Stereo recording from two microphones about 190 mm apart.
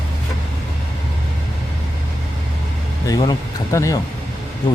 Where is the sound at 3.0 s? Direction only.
20° left (ahead or behind).